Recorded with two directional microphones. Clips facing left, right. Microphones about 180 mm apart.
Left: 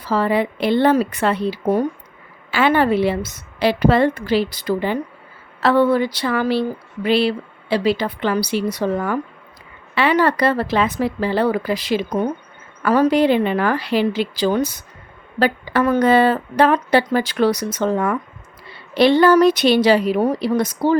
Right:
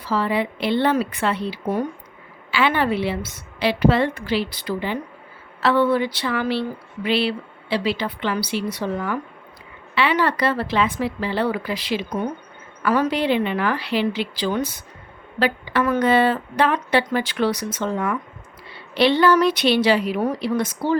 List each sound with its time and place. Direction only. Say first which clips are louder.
0.0 s a woman's voice: left 4 dB; 45° left (ahead or behind)